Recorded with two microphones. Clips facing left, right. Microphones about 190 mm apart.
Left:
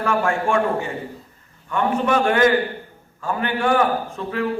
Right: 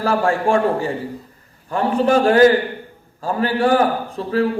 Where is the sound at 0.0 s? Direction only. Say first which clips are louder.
Right 3 dB; 35° right (ahead or behind).